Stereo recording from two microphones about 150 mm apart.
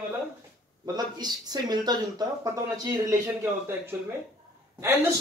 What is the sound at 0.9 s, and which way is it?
Speech, 25° right (ahead or behind).